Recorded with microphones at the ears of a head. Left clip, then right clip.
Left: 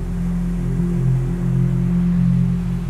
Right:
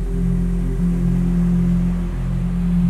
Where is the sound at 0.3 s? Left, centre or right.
Centre.